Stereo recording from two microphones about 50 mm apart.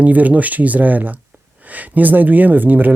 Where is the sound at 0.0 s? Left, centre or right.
Right.